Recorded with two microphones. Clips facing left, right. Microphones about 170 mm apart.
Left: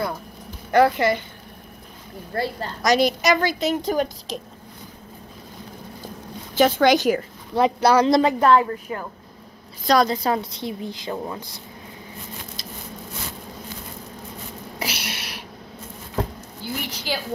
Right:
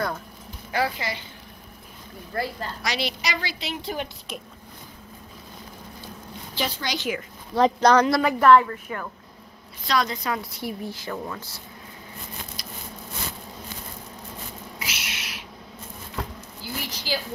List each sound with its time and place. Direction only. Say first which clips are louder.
0.7 s a woman's voice: left 10 dB; 55° left (ahead or behind)
2.3 s a woman's voice: left 3 dB; 30° left (ahead or behind)
2.8 s a woman's voice: left 11 dB; 45° left (ahead or behind)
6.5 s a woman's voice: left 13 dB; 50° left (ahead or behind)
7.5 s speech: even; 10° left (ahead or behind)
8.0 s a woman's voice: left 3 dB; 25° left (ahead or behind)
10.6 s a woman's voice: left 2 dB; 20° left (ahead or behind)
14.8 s a sound: left 8 dB; 35° left (ahead or behind)
16.8 s a sound: right 1 dB; 60° left (ahead or behind)